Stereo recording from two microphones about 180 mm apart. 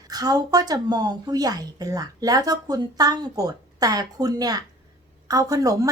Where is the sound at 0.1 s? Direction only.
20° right (ahead or behind).